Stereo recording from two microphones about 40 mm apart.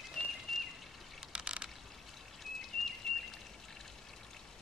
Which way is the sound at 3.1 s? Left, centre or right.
Centre.